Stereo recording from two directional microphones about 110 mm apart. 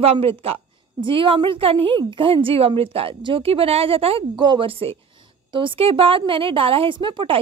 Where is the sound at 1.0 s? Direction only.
50° right (ahead or behind).